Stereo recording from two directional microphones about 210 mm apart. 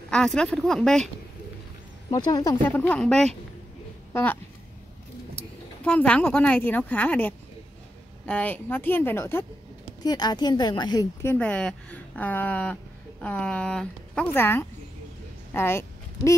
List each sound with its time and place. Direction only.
0.1 s a woman's voice: 5° left (ahead or behind)
2.0 s a woman's voice: 20° left (ahead or behind)
5.9 s a woman's voice: 5° left (ahead or behind)
11.3 s a woman's voice: 5° left (ahead or behind)